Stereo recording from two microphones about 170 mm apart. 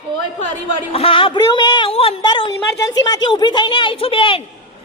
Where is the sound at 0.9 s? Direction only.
35° left (ahead or behind).